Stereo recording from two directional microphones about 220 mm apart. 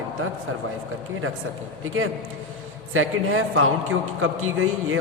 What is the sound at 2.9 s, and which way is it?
A man's voice, 70° right (ahead or behind).